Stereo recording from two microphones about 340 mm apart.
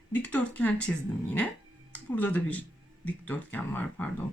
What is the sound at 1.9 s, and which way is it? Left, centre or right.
Speech, centre.